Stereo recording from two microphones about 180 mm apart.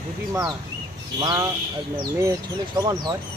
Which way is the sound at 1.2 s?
25° right (ahead or behind).